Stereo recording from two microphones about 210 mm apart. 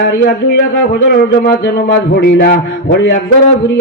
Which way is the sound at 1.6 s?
55° left (ahead or behind).